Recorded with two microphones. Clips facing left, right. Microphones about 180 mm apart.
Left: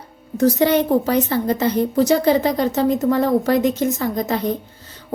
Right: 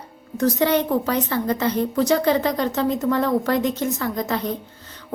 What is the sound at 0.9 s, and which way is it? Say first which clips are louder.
Speech: left 4 dB; 30° left (ahead or behind).